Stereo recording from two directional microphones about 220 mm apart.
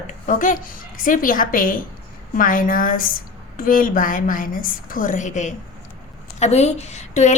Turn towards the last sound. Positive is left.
turn(degrees=30)  # may be behind; listen again after turning